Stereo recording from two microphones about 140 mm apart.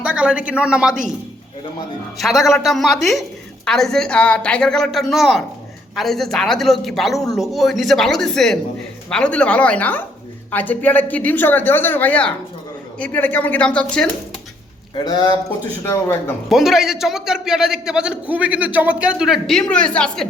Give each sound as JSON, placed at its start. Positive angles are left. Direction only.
{"t": 0.0, "sound": "speech", "side_deg": -5}
{"t": 2.1, "sound": "a man's voice", "side_deg": 0}
{"t": 14.9, "sound": "speech", "side_deg": 30}
{"t": 15.8, "sound": "speech", "side_deg": 15}
{"t": 16.5, "sound": "a man's voice", "side_deg": 0}